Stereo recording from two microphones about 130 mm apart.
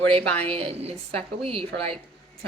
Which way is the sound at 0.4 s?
50° right (ahead or behind).